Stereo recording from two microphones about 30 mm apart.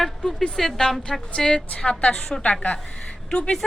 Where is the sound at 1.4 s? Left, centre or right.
Left.